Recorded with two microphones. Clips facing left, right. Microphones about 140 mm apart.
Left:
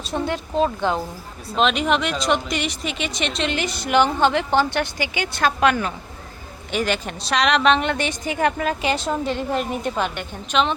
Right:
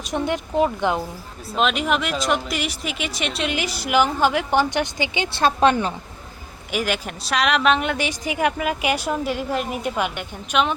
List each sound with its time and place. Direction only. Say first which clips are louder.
0.0 s a woman's voice: right 1 dB; 15° right (ahead or behind)
1.5 s a woman's voice: left 2 dB; 5° right (ahead or behind); by 5.9 s 30° right (ahead or behind)
6.7 s a woman's voice: left 1 dB; 10° right (ahead or behind)